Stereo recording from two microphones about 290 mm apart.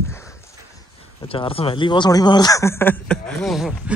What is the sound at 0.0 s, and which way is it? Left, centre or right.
Speech, centre.